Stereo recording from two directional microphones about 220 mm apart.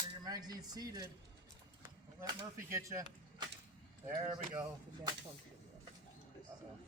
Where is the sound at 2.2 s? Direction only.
15° right (ahead or behind).